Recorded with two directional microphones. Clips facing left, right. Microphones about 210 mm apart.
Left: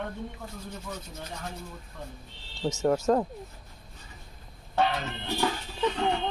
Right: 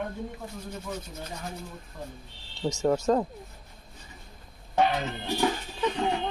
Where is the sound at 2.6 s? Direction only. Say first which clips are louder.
Even; centre (ahead or behind).